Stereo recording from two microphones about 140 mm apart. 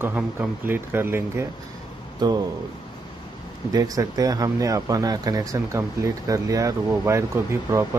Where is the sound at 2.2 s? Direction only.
30° right (ahead or behind).